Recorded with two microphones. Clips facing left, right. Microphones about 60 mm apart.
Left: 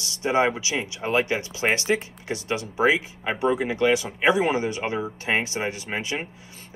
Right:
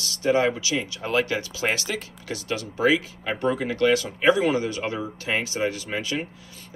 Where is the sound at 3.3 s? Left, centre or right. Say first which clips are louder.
Left 1 dB; centre.